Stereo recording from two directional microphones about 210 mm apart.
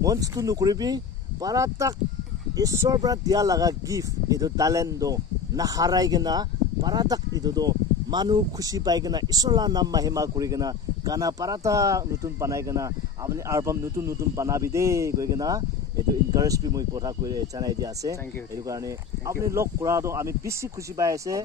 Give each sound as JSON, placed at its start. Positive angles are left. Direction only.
{"t": 0.0, "sound": "speech", "side_deg": -15}